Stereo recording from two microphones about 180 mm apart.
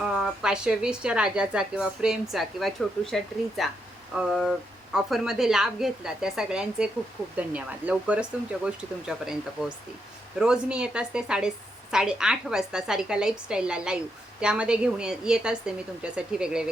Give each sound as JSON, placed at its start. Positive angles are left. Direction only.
{"t": 0.0, "sound": "a woman's voice", "side_deg": 0}